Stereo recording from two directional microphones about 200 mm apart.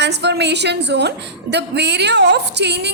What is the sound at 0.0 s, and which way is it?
A woman's voice, 60° right (ahead or behind).